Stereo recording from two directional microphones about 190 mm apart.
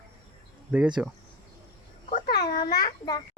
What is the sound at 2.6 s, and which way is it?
Babbling, 20° left (ahead or behind).